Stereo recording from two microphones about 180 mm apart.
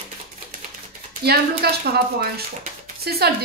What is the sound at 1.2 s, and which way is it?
Speech, 60° right (ahead or behind).